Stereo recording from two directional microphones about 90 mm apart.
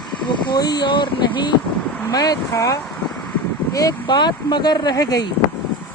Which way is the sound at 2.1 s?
45° left (ahead or behind).